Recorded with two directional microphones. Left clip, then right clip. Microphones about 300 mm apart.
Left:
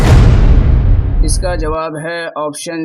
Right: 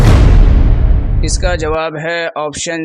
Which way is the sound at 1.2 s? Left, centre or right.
Left.